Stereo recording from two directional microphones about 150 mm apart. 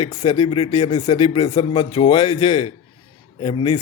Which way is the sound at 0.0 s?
30° left (ahead or behind).